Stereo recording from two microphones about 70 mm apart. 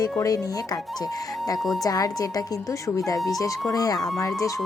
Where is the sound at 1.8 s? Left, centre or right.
Left.